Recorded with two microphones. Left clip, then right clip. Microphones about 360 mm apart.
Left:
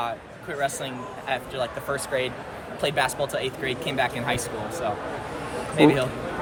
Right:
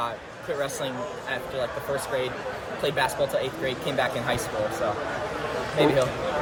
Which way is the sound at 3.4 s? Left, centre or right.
Centre.